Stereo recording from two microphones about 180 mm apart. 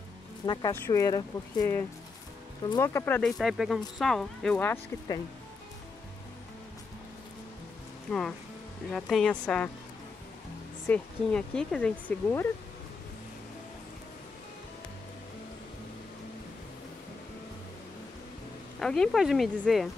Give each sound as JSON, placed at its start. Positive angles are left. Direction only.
{"t": 0.5, "sound": "speech", "side_deg": 20}
{"t": 8.1, "sound": "speech", "side_deg": 5}
{"t": 10.9, "sound": "speech", "side_deg": 5}
{"t": 18.8, "sound": "speech", "side_deg": 0}